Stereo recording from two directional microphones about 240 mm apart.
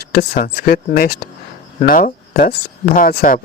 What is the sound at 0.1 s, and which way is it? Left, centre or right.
Speech, left.